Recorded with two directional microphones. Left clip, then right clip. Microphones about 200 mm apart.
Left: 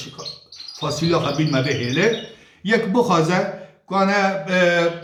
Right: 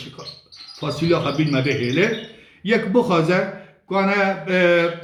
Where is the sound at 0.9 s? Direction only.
20° left (ahead or behind).